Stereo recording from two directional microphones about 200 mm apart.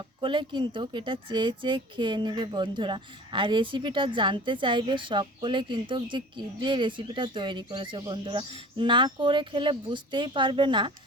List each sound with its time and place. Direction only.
0.2 s speech: 25° right (ahead or behind)